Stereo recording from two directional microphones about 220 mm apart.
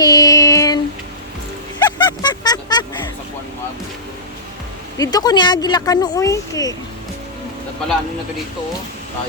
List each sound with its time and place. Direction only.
0.0 s child singing: 15° left (ahead or behind)
1.8 s a sound: 20° left (ahead or behind)
4.9 s speech: 15° left (ahead or behind)